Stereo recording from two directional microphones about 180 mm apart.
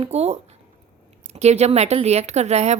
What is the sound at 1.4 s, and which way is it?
Speech, 40° right (ahead or behind).